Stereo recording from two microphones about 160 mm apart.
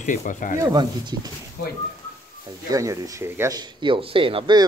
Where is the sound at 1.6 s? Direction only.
80° left.